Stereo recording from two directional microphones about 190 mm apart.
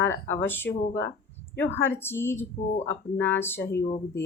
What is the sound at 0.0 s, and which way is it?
Speech, 10° left (ahead or behind).